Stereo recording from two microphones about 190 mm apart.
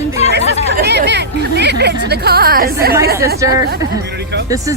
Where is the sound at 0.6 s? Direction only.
60° right (ahead or behind).